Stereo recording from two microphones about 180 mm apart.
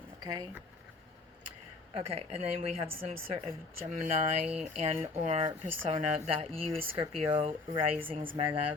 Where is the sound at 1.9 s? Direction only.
35° right (ahead or behind).